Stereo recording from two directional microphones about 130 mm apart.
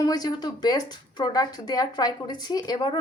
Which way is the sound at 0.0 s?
30° left (ahead or behind).